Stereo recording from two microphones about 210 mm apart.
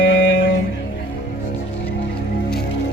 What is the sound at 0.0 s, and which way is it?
Music, 65° left (ahead or behind).